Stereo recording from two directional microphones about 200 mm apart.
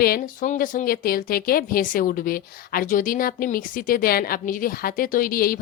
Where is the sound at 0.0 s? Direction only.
45° left (ahead or behind).